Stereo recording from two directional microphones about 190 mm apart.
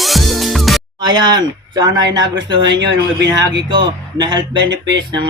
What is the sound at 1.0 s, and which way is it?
Speech, 20° right (ahead or behind).